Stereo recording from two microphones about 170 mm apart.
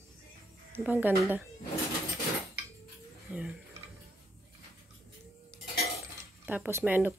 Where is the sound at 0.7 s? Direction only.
10° right (ahead or behind).